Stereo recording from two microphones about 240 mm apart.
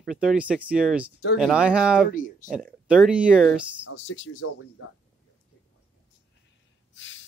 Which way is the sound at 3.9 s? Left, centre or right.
Left.